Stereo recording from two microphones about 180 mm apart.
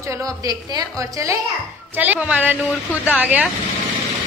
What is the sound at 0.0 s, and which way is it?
A man's voice, 15° right (ahead or behind).